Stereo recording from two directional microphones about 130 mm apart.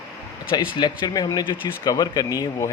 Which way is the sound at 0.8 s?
30° left (ahead or behind).